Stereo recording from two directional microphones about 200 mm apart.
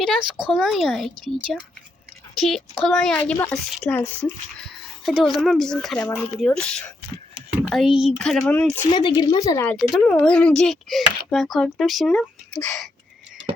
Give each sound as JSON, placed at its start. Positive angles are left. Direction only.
{"t": 0.0, "sound": "speech", "side_deg": -5}
{"t": 2.4, "sound": "speech", "side_deg": 0}
{"t": 3.3, "sound": "a woman's voice", "side_deg": 15}
{"t": 8.9, "sound": "speech", "side_deg": 20}
{"t": 9.7, "sound": "speech", "side_deg": 0}